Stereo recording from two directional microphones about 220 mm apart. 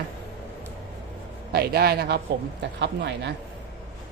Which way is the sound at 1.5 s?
45° right (ahead or behind).